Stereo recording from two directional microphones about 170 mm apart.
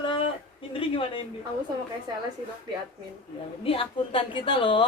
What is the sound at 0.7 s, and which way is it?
Speech, 30° left (ahead or behind).